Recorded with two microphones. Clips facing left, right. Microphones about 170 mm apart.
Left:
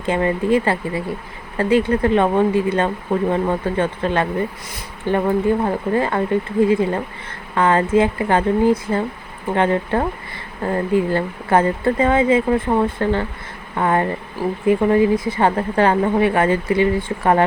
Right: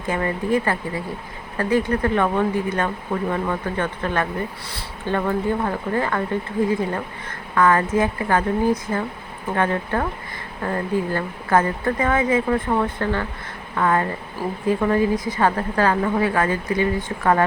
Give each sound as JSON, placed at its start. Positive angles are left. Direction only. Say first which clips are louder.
{"t": 0.0, "sound": "speech", "louder": "left 5 dB", "side_deg": 25}
{"t": 7.5, "sound": "speech", "louder": "left 2 dB", "side_deg": 25}